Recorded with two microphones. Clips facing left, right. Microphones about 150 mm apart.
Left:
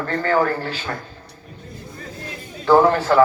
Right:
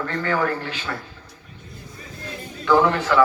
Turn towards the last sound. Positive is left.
turn(degrees=40)  # may be behind; listen again after turning